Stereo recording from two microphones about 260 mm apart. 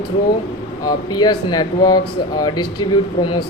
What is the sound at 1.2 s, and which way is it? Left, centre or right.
Speech, centre.